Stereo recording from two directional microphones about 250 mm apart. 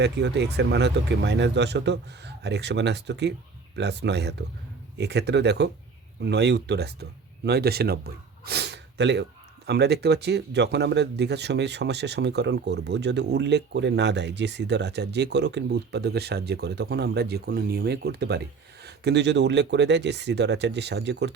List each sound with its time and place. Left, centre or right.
0.0 s speech: right